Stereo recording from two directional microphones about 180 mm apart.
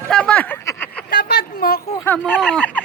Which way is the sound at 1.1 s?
60° left (ahead or behind).